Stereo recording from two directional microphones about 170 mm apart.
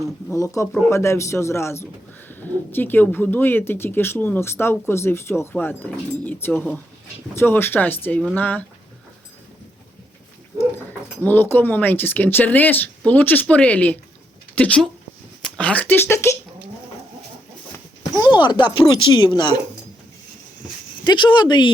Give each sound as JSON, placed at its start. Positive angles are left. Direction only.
{"t": 0.3, "sound": "a man's voice", "side_deg": 15}
{"t": 11.2, "sound": "a man's voice", "side_deg": 10}
{"t": 18.2, "sound": "speech", "side_deg": 25}
{"t": 21.0, "sound": "speech", "side_deg": 25}